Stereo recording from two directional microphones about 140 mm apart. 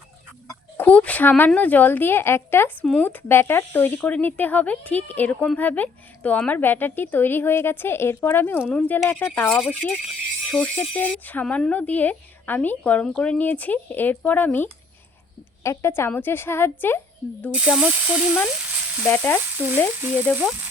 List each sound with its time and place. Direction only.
0.8 s speech: 10° left (ahead or behind)
17.5 s speech: 5° right (ahead or behind)
19.0 s speech: 15° left (ahead or behind)
19.6 s speech: 15° right (ahead or behind)